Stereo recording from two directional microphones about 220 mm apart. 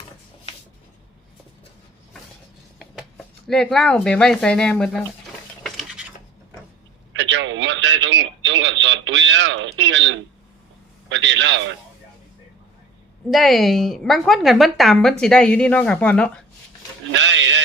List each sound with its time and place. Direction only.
3.4 s a woman's voice: centre (ahead or behind)
5.6 s dishes: centre (ahead or behind)
7.1 s radio: 55° right (ahead or behind)
11.1 s a sound: 55° right (ahead or behind)
13.3 s a woman's voice: centre (ahead or behind)
17.1 s a sound: 55° right (ahead or behind)